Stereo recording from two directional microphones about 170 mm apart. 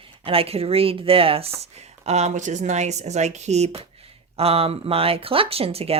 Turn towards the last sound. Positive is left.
turn(degrees=-35)  # may be behind; listen again after turning